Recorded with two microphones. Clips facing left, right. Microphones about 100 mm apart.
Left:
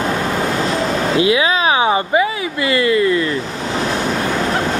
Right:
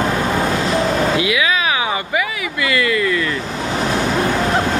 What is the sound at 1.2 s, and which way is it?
Speech, 30° left (ahead or behind).